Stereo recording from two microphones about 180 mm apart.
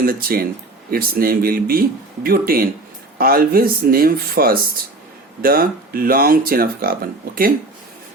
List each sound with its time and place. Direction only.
0.0 s speech: 55° right (ahead or behind)